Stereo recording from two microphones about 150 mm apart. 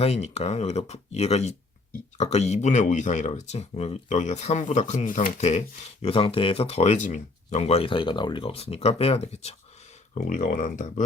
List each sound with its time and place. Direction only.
0.0 s speech: 45° left (ahead or behind)
10.2 s speech: 60° left (ahead or behind)